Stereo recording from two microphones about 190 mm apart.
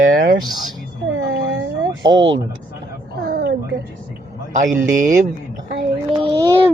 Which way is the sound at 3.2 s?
50° right (ahead or behind).